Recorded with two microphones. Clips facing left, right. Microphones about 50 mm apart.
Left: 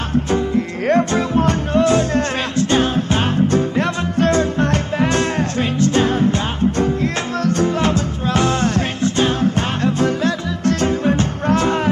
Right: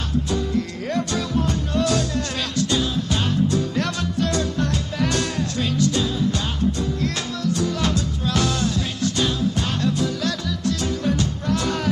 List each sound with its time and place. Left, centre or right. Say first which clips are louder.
0.3 s music: left 5 dB; left
6.3 s music: left 5 dB; left